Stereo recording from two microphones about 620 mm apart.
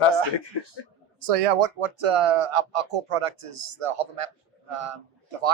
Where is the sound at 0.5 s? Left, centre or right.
Left.